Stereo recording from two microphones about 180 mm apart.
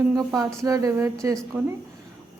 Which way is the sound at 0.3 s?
20° right (ahead or behind).